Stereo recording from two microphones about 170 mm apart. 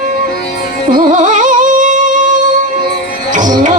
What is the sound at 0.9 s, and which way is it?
Music, 50° right (ahead or behind).